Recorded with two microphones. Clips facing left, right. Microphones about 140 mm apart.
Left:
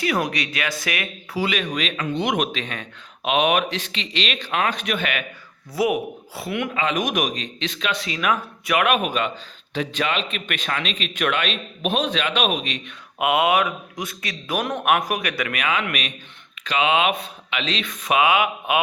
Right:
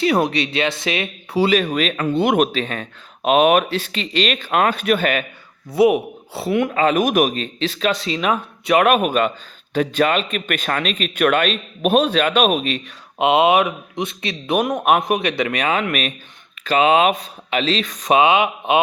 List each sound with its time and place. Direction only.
0.0 s a man's voice: 30° right (ahead or behind)
5.7 s speech: 25° right (ahead or behind); by 12.8 s 45° right (ahead or behind)
13.1 s a man's voice: 25° right (ahead or behind)